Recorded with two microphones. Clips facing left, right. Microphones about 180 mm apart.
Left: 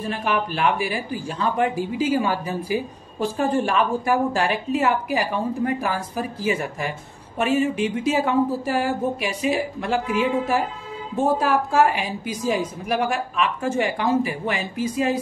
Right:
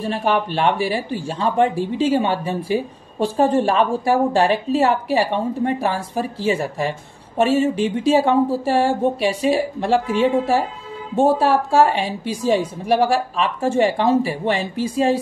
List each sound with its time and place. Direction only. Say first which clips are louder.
0.0 s speech: right 4 dB; 30° right (ahead or behind)